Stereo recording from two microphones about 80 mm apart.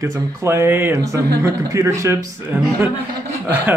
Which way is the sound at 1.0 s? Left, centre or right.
Right.